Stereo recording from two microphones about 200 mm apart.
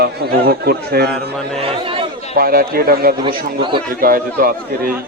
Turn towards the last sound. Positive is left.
turn(degrees=-45)  # may be behind; listen again after turning